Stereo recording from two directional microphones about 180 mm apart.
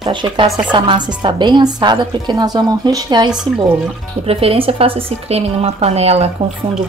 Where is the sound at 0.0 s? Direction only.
25° right (ahead or behind).